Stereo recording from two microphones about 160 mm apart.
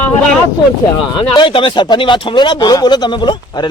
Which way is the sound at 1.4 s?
30° left (ahead or behind).